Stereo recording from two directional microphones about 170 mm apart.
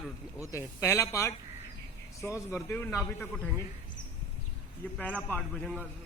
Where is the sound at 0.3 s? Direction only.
20° left (ahead or behind).